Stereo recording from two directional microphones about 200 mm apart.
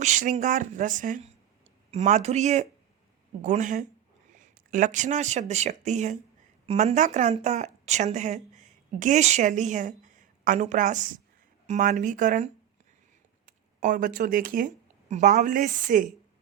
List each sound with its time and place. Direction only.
0.0 s speech: 40° right (ahead or behind)